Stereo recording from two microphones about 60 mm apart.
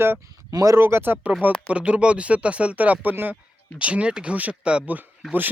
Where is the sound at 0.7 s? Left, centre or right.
Right.